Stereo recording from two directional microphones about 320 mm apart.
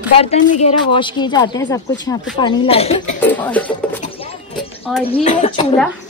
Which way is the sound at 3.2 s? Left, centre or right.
Centre.